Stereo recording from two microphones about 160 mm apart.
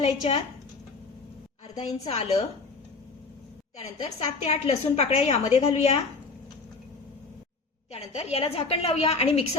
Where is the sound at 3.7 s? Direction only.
40° left (ahead or behind).